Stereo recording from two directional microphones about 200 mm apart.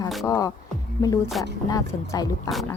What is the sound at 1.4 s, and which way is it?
Speech, centre (ahead or behind).